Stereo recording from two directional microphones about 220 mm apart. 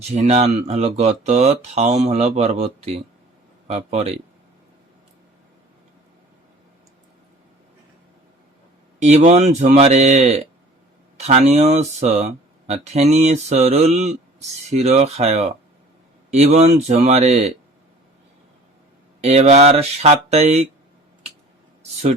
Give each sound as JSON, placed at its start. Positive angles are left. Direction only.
{"t": 0.0, "sound": "speech", "side_deg": -30}
{"t": 9.0, "sound": "speech", "side_deg": -30}
{"t": 19.2, "sound": "speech", "side_deg": -30}